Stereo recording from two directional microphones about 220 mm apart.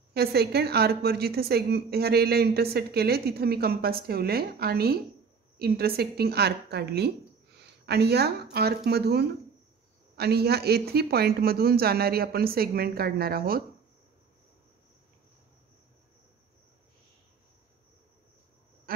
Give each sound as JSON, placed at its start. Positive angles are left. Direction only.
{"t": 0.1, "sound": "a woman's voice", "side_deg": -45}
{"t": 18.9, "sound": "duck", "side_deg": -40}